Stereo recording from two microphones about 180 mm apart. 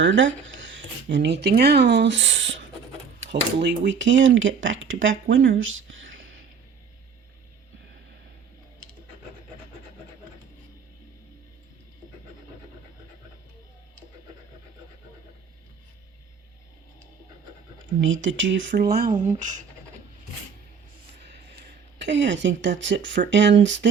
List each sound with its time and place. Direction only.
0.0 s speech: 90° right
1.1 s speech: 70° right (ahead or behind); by 6.1 s 90° right
18.0 s speech: 90° right; by 19.6 s 45° right (ahead or behind)
21.2 s a sound: 70° right (ahead or behind); by 23.2 s 90° right
23.3 s speech: 80° right